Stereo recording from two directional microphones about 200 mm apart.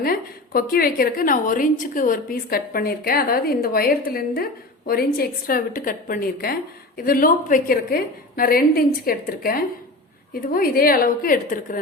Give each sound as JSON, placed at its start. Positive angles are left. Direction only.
{"t": 0.0, "sound": "a woman's voice", "side_deg": 45}